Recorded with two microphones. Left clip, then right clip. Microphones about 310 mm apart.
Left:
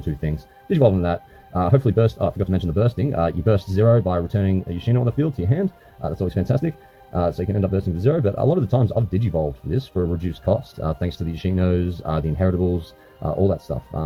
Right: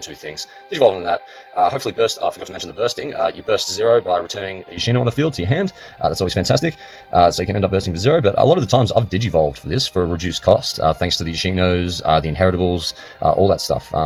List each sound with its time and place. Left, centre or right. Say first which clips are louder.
0.3 s speech: right 3 dB; centre